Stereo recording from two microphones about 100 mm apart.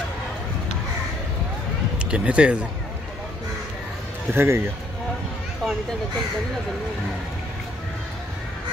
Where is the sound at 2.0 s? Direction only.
10° right (ahead or behind).